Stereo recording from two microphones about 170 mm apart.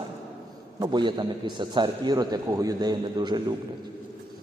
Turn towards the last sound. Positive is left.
turn(degrees=-25)  # may be behind; listen again after turning